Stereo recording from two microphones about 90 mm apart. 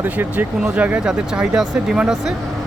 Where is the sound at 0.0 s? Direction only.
20° right (ahead or behind).